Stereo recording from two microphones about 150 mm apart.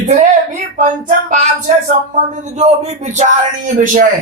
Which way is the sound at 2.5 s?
50° right (ahead or behind).